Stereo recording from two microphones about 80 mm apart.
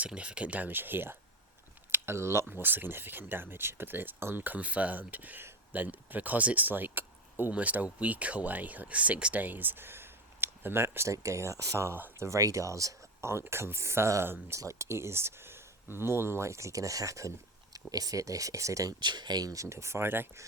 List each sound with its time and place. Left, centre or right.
0.0 s speech: centre; by 2.5 s right
2.5 s speech: right
12.2 s speech: right
13.3 s speech: right
18.9 s speech: right
19.6 s speech: right